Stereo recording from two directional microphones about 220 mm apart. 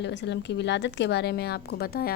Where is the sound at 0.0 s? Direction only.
55° left (ahead or behind).